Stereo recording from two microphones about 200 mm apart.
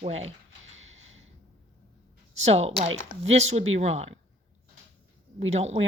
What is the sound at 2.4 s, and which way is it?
A woman's voice, 30° right (ahead or behind).